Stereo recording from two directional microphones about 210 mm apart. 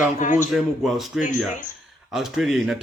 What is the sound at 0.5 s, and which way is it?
Speech, centre (ahead or behind).